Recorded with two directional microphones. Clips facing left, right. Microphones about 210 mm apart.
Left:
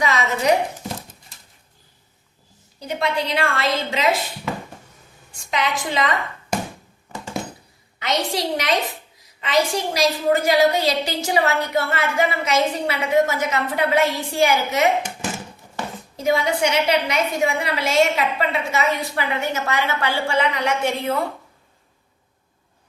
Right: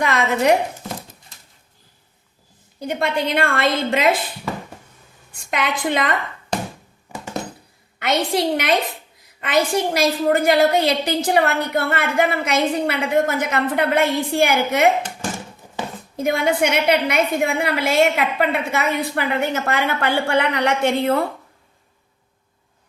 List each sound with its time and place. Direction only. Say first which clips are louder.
0.0 s speech: right 2 dB; 55° right (ahead or behind)
2.8 s a woman's voice: right 2 dB; 50° right (ahead or behind)
5.3 s a woman's voice: even; 55° right (ahead or behind)
7.9 s a woman's voice: right 3 dB; 55° right (ahead or behind)
16.1 s a woman's voice: right 1 dB; 55° right (ahead or behind)